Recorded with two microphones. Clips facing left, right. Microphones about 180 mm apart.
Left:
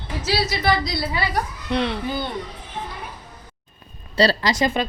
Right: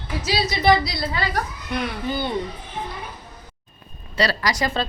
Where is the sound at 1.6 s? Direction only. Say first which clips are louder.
Left 7 dB; 30° left (ahead or behind).